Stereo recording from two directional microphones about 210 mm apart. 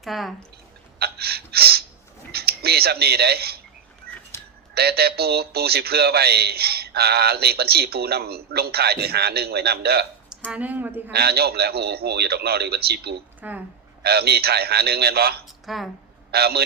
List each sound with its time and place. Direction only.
0.0 s speech: centre (ahead or behind)
0.9 s gasp: 50° right (ahead or behind)
2.3 s speech: 50° right (ahead or behind)
4.7 s a man's voice: 50° right (ahead or behind)
10.2 s speech: 5° right (ahead or behind)
11.1 s a man's voice: 50° right (ahead or behind)
15.6 s speech: centre (ahead or behind)
16.3 s a man's voice: 50° right (ahead or behind)